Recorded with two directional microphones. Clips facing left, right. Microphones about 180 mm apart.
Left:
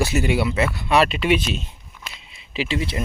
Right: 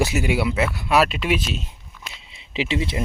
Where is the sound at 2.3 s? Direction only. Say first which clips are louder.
Right 1 dB; 20° right (ahead or behind).